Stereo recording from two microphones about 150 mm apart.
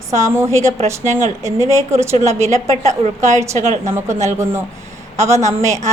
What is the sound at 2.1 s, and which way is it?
Speech, 50° right (ahead or behind).